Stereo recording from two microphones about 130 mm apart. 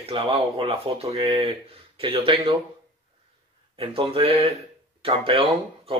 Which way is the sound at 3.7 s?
45° right (ahead or behind).